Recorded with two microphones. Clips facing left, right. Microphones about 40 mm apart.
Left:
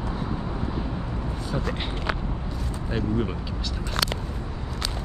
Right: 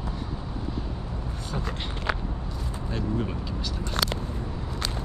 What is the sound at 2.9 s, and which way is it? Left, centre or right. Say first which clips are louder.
Speech: left 3 dB; left.